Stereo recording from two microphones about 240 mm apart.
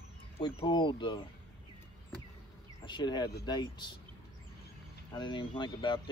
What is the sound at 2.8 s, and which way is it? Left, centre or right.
Speech, centre.